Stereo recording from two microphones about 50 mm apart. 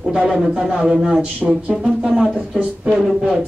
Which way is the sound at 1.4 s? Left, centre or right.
Centre.